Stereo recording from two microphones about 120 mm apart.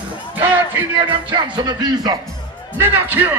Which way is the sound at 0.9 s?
40° right (ahead or behind).